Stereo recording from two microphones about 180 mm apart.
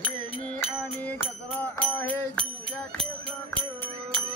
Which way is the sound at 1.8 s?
10° left (ahead or behind).